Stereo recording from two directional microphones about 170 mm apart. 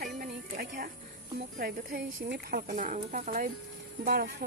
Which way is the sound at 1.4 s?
60° right (ahead or behind).